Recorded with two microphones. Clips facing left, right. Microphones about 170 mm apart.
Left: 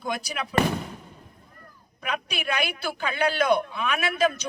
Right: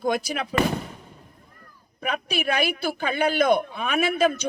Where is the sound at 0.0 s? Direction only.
50° right (ahead or behind).